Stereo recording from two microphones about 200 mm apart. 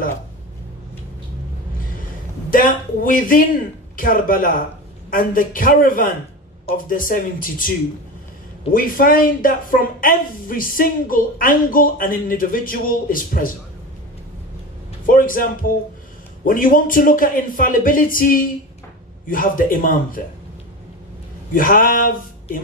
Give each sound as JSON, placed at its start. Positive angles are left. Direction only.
{"t": 2.5, "sound": "speech", "side_deg": 45}
{"t": 8.7, "sound": "speech", "side_deg": 45}
{"t": 15.0, "sound": "speech", "side_deg": 45}
{"t": 21.5, "sound": "speech", "side_deg": 45}